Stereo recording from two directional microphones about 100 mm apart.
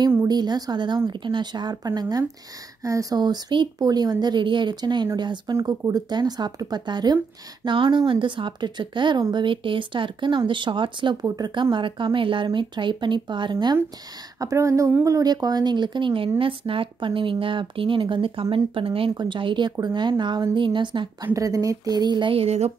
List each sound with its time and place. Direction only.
0.3 s speech: 45° right (ahead or behind)
5.6 s speech: 35° right (ahead or behind); by 11.1 s 55° right (ahead or behind)
11.2 s speech: 40° right (ahead or behind)
14.4 s speech: 30° right (ahead or behind); by 19.1 s 65° right (ahead or behind)
19.1 s speech: 50° right (ahead or behind)
21.3 s speech: 35° right (ahead or behind)
22.3 s a sound: 85° right